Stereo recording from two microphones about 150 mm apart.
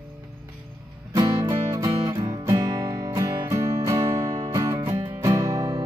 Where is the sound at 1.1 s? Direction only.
30° right (ahead or behind).